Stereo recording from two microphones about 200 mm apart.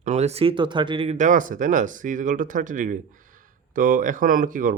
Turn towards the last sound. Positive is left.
turn(degrees=-40)  # may be behind; listen again after turning